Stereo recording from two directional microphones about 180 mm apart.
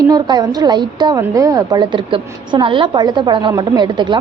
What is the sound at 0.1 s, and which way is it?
A woman's voice, 20° right (ahead or behind).